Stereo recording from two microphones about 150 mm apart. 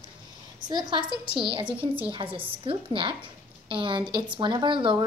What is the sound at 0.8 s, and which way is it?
A woman's voice, 30° right (ahead or behind).